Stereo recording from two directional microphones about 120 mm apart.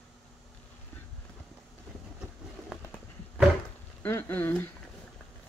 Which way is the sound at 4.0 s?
15° left (ahead or behind).